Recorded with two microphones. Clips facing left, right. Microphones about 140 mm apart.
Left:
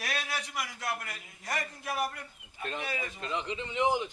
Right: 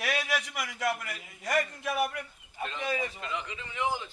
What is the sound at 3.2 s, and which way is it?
Speech, 30° left (ahead or behind).